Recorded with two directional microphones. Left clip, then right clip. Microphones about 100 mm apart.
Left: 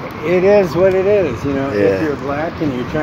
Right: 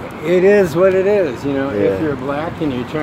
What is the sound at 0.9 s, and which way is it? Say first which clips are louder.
Speech: even; 40° right (ahead or behind).